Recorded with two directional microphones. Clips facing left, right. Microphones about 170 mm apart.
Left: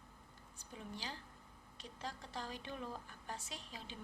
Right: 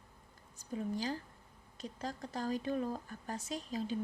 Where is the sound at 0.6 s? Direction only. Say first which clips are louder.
Right 12 dB; 40° right (ahead or behind).